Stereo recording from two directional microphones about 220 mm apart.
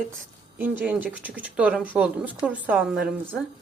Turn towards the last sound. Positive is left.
turn(degrees=0)  # may be behind; listen again after turning